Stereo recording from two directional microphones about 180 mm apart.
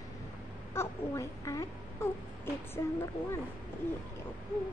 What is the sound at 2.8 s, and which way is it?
Speech, 15° left (ahead or behind).